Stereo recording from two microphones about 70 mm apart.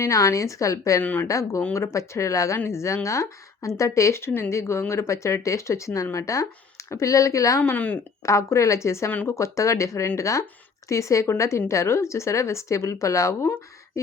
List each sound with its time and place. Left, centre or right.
0.0 s speech: left
1.0 s speech: left
1.3 s speech: left
7.6 s speech: left
8.2 s speech: left
9.0 s speech: left
9.3 s speech: left